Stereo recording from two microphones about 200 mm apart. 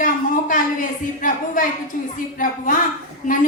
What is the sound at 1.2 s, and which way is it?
A woman's voice, 45° left (ahead or behind).